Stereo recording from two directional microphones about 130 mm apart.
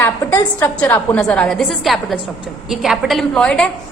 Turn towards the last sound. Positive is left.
turn(degrees=5)  # may be behind; listen again after turning